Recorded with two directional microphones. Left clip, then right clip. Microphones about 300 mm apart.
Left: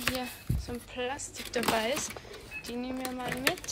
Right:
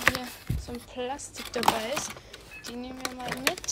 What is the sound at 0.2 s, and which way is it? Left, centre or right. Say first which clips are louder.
Speech: even; centre.